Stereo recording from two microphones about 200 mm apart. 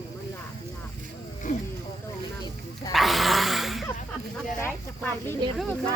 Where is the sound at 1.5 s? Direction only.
40° left (ahead or behind).